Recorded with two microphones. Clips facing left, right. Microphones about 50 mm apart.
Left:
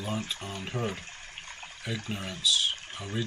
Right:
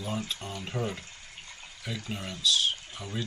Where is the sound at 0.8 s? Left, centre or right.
Left.